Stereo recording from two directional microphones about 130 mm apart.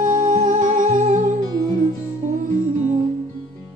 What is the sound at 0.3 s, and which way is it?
Music, 70° right (ahead or behind).